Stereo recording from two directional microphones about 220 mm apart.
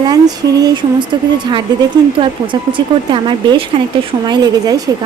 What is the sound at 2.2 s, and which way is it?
A woman's voice, 20° right (ahead or behind).